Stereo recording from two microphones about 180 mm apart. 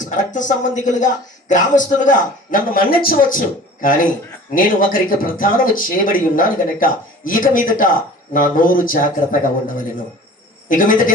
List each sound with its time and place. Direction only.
0.3 s speech: 45° left (ahead or behind)